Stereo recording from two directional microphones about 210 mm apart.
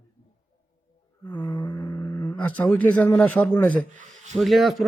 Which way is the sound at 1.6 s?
15° left (ahead or behind).